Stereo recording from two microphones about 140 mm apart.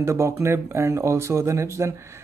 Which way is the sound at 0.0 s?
20° right (ahead or behind).